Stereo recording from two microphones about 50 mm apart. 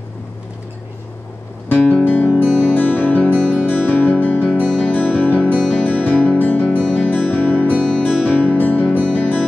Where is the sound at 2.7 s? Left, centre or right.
Left.